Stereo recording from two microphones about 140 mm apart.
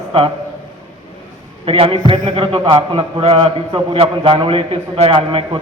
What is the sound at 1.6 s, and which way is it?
A man's voice, 40° right (ahead or behind).